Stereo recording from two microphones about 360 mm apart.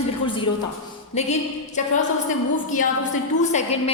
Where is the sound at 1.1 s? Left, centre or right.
Centre.